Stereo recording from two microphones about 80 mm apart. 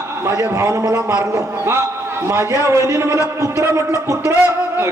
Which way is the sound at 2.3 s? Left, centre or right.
Right.